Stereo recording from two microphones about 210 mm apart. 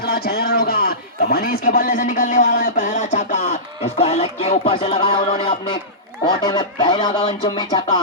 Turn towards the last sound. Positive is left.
turn(degrees=25)  # may be behind; listen again after turning